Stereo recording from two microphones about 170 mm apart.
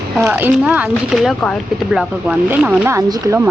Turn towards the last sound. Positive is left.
turn(degrees=-15)  # may be behind; listen again after turning